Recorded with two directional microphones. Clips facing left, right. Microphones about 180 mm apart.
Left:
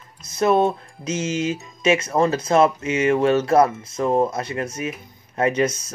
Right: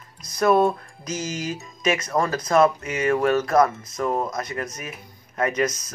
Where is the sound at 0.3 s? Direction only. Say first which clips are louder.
Left 1 dB; 25° left (ahead or behind).